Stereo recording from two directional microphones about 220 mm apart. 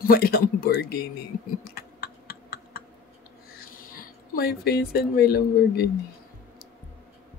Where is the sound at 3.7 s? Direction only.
40° left (ahead or behind).